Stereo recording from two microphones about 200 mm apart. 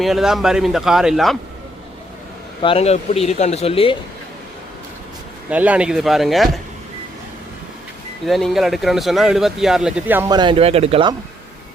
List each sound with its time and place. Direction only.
0.0 s speech: centre (ahead or behind)
2.6 s speech: 30° left (ahead or behind)
5.5 s speech: 5° right (ahead or behind)
8.3 s speech: centre (ahead or behind)
10.3 s speech: 25° right (ahead or behind)